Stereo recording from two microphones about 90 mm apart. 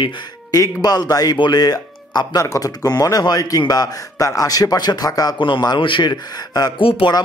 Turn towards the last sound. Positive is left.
turn(degrees=80)